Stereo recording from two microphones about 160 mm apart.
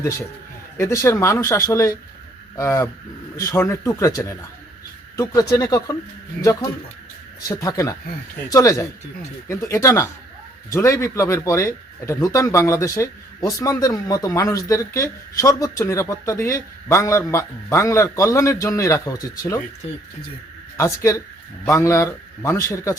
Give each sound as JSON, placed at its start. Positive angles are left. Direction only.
{"t": 0.0, "sound": "speech", "side_deg": 15}
{"t": 20.7, "sound": "speech", "side_deg": 20}